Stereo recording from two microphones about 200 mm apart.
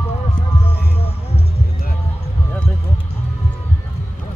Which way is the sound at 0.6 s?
30° left (ahead or behind).